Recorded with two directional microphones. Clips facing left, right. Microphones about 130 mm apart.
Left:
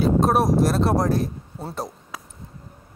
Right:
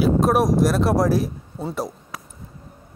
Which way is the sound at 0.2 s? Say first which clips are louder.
Right 1 dB; 30° left (ahead or behind).